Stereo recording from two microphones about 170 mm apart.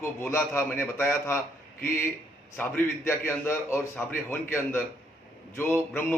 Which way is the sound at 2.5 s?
15° left (ahead or behind).